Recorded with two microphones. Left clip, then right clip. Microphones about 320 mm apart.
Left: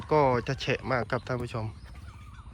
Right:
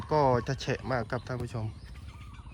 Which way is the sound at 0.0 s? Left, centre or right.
Centre.